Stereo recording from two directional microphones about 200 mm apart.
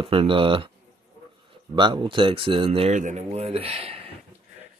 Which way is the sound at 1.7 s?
25° right (ahead or behind).